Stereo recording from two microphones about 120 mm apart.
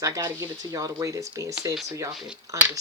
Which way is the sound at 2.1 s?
5° right (ahead or behind).